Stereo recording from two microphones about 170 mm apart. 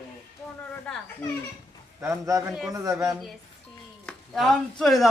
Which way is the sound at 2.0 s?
20° right (ahead or behind).